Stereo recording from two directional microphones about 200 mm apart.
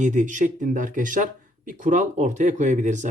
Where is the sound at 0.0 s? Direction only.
40° right (ahead or behind).